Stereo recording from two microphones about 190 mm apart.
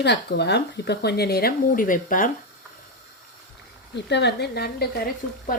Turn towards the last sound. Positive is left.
turn(degrees=55)  # may be behind; listen again after turning